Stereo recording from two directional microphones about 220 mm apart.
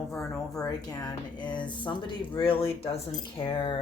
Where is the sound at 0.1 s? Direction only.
15° left (ahead or behind).